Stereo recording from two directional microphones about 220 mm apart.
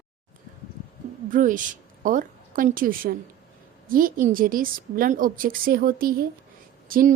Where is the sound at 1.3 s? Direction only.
35° right (ahead or behind).